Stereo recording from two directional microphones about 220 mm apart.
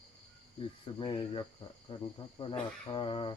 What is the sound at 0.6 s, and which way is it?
Speech, 25° left (ahead or behind).